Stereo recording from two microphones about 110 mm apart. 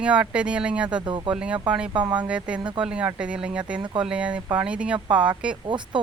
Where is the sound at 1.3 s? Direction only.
10° right (ahead or behind).